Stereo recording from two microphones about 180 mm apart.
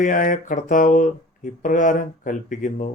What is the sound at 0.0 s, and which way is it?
Speech, 45° left (ahead or behind).